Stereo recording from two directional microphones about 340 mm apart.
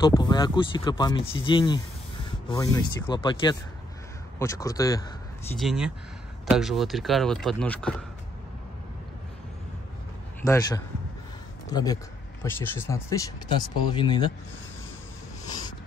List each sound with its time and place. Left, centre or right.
0.0 s speech: centre
5.6 s speech: centre
10.4 s speech: centre